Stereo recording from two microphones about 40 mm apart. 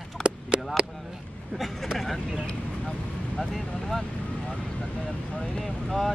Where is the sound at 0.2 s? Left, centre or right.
Right.